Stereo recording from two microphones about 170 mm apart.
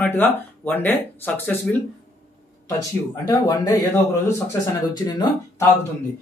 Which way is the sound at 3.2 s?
20° left (ahead or behind).